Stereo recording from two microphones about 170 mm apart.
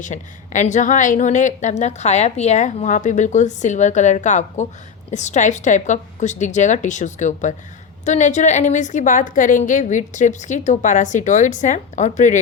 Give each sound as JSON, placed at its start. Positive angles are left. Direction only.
{"t": 0.0, "sound": "a woman's voice", "side_deg": 45}